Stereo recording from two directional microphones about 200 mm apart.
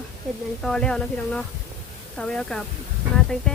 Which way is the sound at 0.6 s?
5° left (ahead or behind).